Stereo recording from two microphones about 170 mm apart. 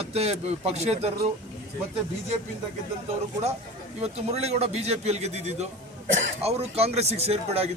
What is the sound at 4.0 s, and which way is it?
A man's voice, 40° right (ahead or behind).